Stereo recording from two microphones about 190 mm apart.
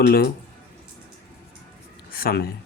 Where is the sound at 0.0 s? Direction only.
55° left (ahead or behind).